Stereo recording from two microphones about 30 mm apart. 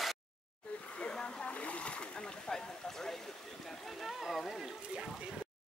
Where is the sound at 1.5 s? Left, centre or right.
Left.